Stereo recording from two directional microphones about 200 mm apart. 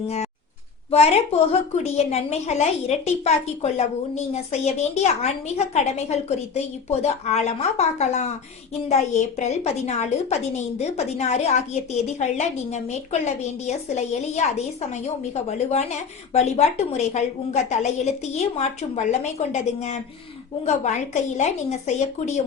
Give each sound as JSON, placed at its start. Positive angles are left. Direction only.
{"t": 0.9, "sound": "a woman's voice", "side_deg": 30}